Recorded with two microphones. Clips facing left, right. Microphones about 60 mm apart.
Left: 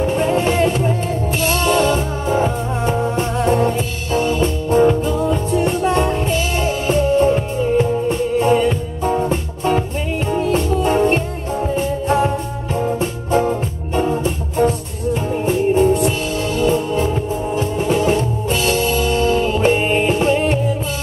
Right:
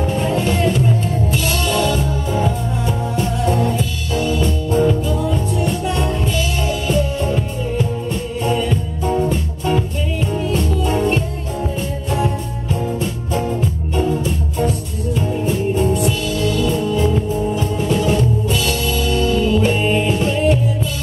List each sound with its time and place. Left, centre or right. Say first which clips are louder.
0.0 s music: left 2 dB; left